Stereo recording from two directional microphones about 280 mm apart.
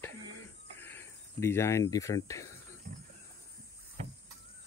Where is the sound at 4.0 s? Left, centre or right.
Right.